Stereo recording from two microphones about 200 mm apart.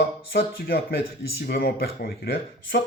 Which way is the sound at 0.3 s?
50° left (ahead or behind).